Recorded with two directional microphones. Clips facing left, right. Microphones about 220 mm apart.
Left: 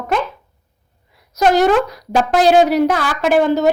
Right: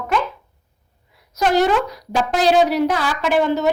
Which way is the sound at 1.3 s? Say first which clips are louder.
Left 4 dB; 45° left (ahead or behind).